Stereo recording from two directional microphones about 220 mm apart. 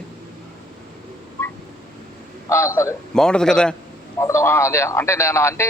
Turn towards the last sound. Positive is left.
turn(degrees=10)  # may be behind; listen again after turning